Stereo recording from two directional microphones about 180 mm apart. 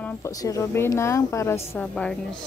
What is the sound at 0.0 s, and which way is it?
A woman's voice, 15° left (ahead or behind).